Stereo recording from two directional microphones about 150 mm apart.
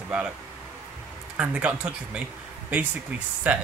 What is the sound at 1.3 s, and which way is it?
Speech, 10° right (ahead or behind).